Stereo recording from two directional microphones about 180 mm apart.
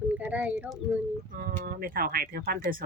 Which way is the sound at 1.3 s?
55° right (ahead or behind).